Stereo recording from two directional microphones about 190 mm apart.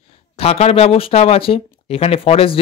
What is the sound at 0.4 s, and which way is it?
A man's voice, 35° left (ahead or behind).